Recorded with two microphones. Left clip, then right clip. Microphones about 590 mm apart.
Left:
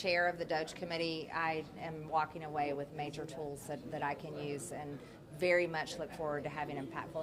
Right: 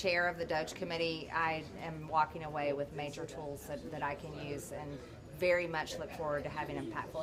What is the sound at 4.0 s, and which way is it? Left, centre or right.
A woman's voice, right.